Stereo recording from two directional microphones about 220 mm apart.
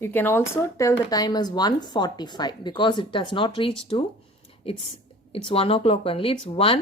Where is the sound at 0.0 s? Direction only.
10° left (ahead or behind).